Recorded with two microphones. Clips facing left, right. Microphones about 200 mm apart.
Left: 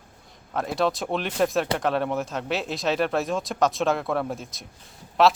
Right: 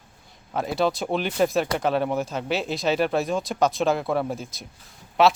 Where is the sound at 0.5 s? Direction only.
Centre (ahead or behind).